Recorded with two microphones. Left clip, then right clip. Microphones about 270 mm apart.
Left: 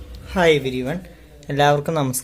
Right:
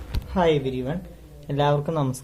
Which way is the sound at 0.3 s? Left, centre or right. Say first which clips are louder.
Left 5 dB; left.